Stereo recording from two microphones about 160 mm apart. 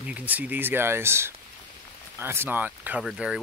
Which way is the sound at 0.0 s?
10° right (ahead or behind).